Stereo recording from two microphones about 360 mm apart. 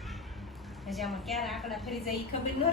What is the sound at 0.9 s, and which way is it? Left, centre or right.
A woman's voice, centre.